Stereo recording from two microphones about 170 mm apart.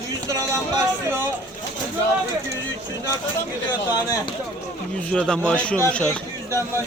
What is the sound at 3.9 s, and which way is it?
Speech, 25° left (ahead or behind).